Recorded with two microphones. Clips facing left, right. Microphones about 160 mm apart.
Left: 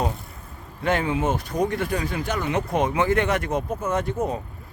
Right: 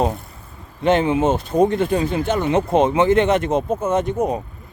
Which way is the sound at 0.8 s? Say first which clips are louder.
Right 7 dB; 25° right (ahead or behind).